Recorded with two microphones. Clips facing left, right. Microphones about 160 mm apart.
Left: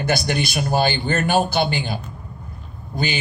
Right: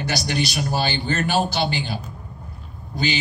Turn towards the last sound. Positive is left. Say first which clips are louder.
# even
turn(degrees=50)  # may be behind; listen again after turning